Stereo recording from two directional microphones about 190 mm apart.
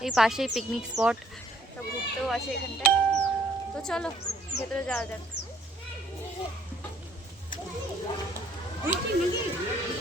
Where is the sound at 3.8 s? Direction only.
5° left (ahead or behind).